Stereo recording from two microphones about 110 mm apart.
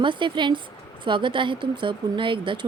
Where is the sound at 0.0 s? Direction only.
45° right (ahead or behind).